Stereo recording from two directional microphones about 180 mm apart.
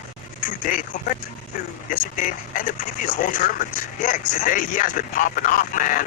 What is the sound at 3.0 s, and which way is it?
Speech, 45° left (ahead or behind).